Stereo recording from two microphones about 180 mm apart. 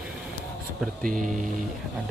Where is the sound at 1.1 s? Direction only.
45° right (ahead or behind).